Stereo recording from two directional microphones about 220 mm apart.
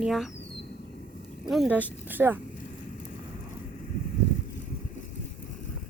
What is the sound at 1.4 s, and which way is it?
Speech, centre (ahead or behind).